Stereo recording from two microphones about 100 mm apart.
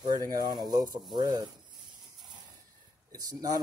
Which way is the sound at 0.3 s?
45° right (ahead or behind).